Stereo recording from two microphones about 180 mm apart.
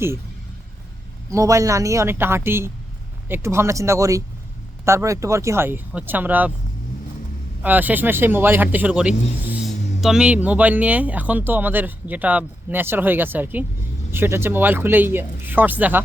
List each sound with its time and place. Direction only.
1.3 s speech: 15° right (ahead or behind)
7.6 s speech: 10° right (ahead or behind)